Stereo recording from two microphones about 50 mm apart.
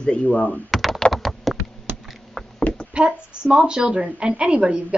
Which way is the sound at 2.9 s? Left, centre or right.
Right.